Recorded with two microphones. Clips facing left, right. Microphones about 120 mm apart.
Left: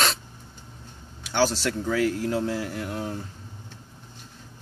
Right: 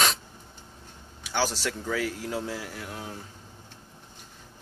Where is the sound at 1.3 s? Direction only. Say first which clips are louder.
Left 5 dB; 10° right (ahead or behind).